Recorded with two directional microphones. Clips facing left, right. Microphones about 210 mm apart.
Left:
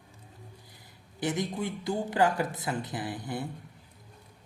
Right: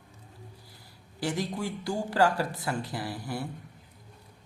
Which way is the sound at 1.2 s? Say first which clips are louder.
Even; 20° left (ahead or behind).